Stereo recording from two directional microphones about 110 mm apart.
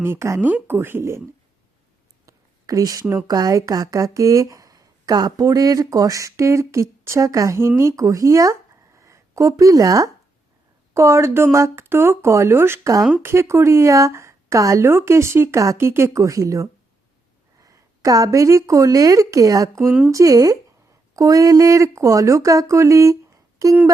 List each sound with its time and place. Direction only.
0.0 s a woman's voice: 25° right (ahead or behind)
2.2 s a sound: 30° right (ahead or behind)
3.2 s a woman's voice: 35° right (ahead or behind)